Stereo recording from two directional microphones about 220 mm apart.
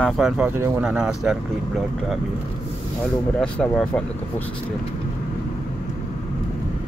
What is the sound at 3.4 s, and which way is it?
Speech, 5° left (ahead or behind).